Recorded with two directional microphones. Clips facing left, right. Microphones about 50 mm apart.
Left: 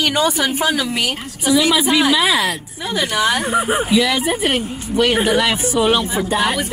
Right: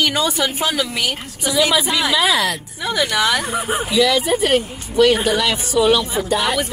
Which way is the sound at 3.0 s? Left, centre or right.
Left.